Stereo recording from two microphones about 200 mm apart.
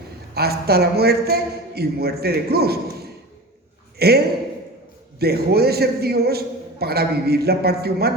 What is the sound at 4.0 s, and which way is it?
A man's voice, 50° right (ahead or behind).